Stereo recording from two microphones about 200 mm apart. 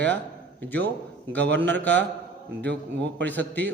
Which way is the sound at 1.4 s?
60° right (ahead or behind).